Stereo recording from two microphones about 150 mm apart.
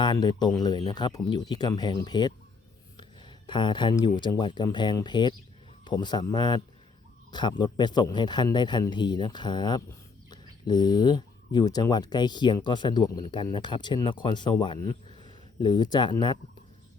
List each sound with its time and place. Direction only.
0.0 s speech: 30° left (ahead or behind)
15.6 s speech: 30° left (ahead or behind)